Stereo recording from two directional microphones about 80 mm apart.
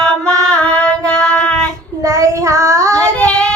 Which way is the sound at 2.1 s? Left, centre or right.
Right.